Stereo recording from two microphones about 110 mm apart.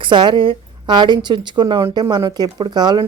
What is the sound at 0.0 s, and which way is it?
Speech, 45° right (ahead or behind).